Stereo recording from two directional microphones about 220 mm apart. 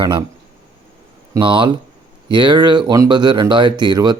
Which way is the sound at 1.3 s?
20° right (ahead or behind).